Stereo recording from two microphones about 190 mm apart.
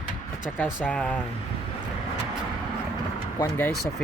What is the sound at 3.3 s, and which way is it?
Speech, 15° left (ahead or behind).